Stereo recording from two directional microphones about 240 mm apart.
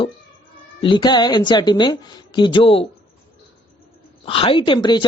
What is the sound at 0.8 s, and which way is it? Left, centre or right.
A woman's voice, centre.